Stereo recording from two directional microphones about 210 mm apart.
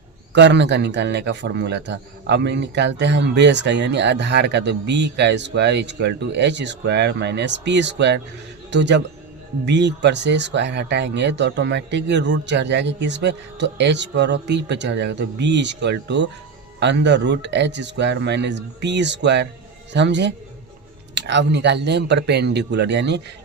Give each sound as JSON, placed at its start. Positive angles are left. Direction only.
{"t": 0.3, "sound": "a man's voice", "side_deg": -55}